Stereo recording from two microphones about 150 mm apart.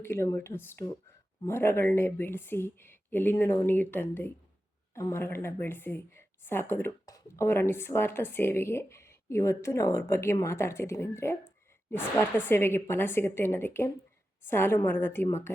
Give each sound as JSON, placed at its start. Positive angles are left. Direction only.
{"t": 0.0, "sound": "a woman's voice", "side_deg": 15}